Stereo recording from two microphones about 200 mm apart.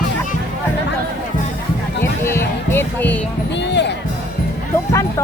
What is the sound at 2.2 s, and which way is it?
Music, 10° left (ahead or behind).